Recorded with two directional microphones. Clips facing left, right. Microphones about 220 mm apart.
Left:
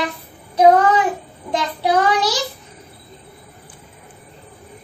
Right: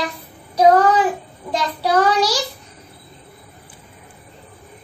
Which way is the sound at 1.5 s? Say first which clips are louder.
Left 1 dB; 20° left (ahead or behind).